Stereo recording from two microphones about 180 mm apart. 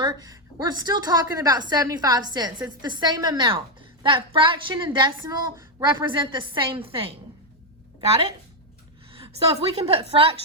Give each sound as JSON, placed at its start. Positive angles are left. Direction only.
{"t": 0.0, "sound": "a woman's voice", "side_deg": -20}
{"t": 9.1, "sound": "a woman's voice", "side_deg": -30}